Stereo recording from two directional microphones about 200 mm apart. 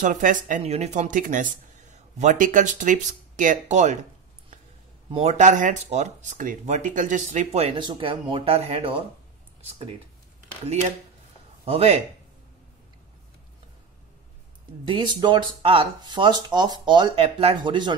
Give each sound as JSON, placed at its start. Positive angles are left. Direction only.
{"t": 0.0, "sound": "speech", "side_deg": -40}
{"t": 5.1, "sound": "speech", "side_deg": -30}
{"t": 10.6, "sound": "speech", "side_deg": -30}
{"t": 14.9, "sound": "speech", "side_deg": -25}